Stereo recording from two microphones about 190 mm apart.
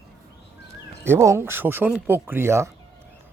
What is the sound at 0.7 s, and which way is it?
Speech, 15° right (ahead or behind).